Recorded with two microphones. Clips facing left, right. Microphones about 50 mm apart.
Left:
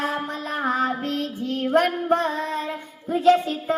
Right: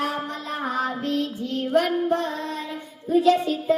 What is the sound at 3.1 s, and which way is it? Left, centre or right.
Music, left.